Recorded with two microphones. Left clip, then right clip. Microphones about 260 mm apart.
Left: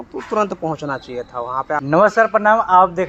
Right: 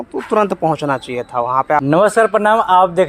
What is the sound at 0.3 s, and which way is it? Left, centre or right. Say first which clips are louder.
Speech: right 5 dB; right.